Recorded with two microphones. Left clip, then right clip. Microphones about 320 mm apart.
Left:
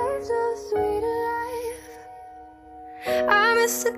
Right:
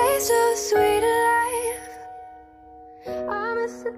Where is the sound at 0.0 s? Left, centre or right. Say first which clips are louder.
Right 5 dB; right.